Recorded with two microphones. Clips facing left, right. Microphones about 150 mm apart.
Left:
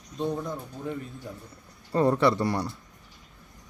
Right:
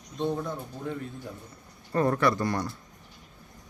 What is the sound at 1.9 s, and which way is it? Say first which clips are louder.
Speech: left 2 dB; 20° left (ahead or behind).